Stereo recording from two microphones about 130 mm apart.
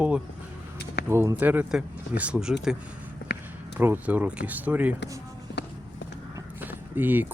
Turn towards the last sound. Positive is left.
turn(degrees=-15)  # may be behind; listen again after turning